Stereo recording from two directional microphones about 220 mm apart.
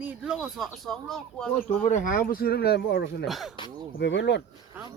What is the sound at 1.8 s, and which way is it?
Speech, 35° left (ahead or behind).